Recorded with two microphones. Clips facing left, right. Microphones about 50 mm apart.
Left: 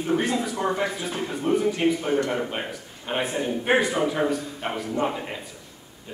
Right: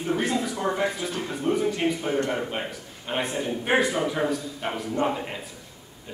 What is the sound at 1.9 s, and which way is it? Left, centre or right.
Speech, left.